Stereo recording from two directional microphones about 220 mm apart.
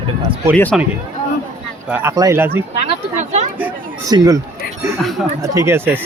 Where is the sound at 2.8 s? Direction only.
30° right (ahead or behind).